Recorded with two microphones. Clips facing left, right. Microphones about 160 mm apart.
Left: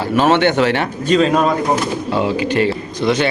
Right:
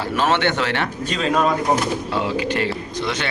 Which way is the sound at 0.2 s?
15° left (ahead or behind).